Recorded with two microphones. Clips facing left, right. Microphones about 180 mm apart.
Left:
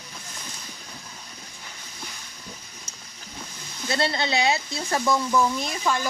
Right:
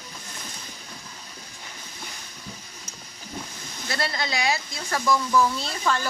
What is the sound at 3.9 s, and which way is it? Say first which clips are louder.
Speech: left 4 dB; 25° left (ahead or behind).